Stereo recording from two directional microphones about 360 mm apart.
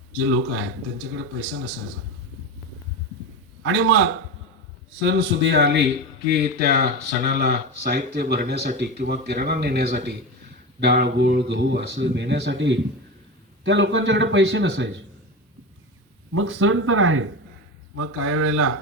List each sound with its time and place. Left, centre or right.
0.3 s speech: right
3.6 s speech: right
16.3 s speech: right